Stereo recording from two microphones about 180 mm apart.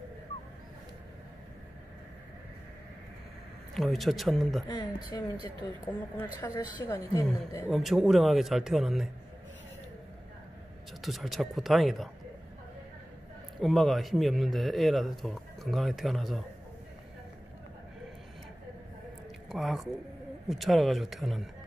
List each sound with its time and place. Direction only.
3.7 s speech: centre (ahead or behind)
4.6 s speech: 25° left (ahead or behind)
5.9 s a woman's voice: 10° left (ahead or behind)
7.7 s speech: centre (ahead or behind)
11.0 s speech: centre (ahead or behind)
13.6 s speech: centre (ahead or behind)
19.5 s speech: centre (ahead or behind)